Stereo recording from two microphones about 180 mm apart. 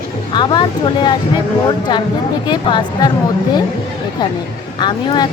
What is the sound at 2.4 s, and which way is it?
Speech, 25° left (ahead or behind).